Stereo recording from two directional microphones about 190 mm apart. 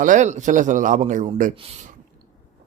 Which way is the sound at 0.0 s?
40° right (ahead or behind).